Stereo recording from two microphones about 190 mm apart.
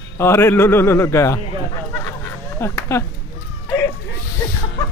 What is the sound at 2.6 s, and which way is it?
Speech, 15° left (ahead or behind).